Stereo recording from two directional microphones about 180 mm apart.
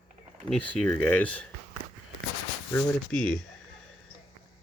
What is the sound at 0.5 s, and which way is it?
Speech, 5° left (ahead or behind).